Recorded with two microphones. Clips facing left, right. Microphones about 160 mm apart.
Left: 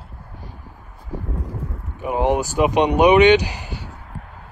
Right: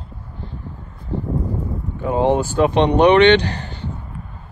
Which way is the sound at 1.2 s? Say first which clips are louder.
Right 8 dB; 35° right (ahead or behind).